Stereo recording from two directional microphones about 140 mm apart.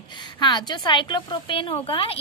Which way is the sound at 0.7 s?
30° left (ahead or behind).